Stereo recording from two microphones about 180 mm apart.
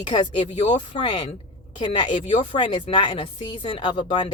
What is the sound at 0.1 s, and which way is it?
A woman's voice, 25° left (ahead or behind).